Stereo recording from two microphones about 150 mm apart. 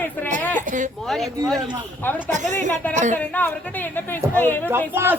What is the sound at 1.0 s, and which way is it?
Speech, centre (ahead or behind).